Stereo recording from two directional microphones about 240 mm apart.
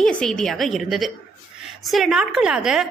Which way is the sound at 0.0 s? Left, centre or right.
Centre.